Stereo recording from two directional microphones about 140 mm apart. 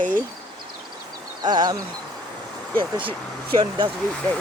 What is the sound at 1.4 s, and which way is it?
Speech, 30° right (ahead or behind).